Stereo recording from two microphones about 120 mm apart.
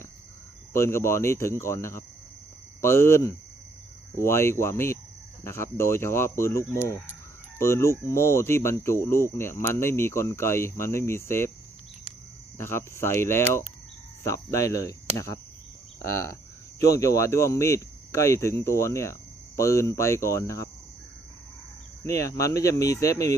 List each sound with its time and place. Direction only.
0.7 s speech: 25° left (ahead or behind)
12.5 s speech: 20° left (ahead or behind)
22.0 s speech: 25° left (ahead or behind)